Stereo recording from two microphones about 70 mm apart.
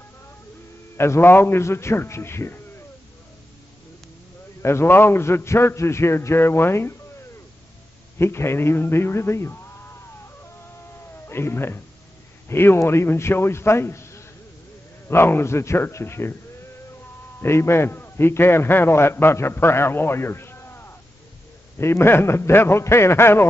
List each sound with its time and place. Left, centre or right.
0.9 s a man's voice: left
4.6 s a man's voice: left
8.2 s a man's voice: left
11.2 s a man's voice: left
17.4 s a man's voice: left